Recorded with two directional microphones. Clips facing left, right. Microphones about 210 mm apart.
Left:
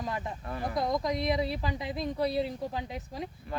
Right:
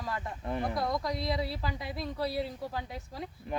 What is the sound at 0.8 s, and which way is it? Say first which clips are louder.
A woman's voice: left 3 dB; 20° left (ahead or behind).